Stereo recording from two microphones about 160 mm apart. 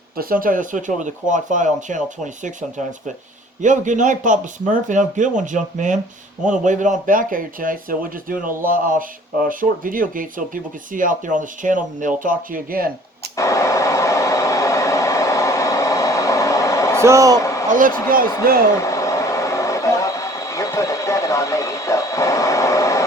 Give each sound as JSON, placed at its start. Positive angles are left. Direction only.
{"t": 0.2, "sound": "speech", "side_deg": -65}
{"t": 13.3, "sound": "a sound", "side_deg": 20}
{"t": 17.0, "sound": "speech", "side_deg": -20}
{"t": 17.3, "sound": "a sound", "side_deg": 20}
{"t": 17.7, "sound": "a man's voice", "side_deg": -55}
{"t": 18.8, "sound": "vehicle", "side_deg": 20}